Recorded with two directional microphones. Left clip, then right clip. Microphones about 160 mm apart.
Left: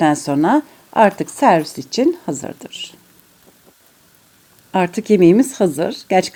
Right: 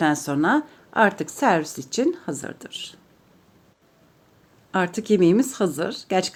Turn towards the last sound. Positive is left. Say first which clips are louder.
# left 7 dB
turn(degrees=30)  # may be behind; listen again after turning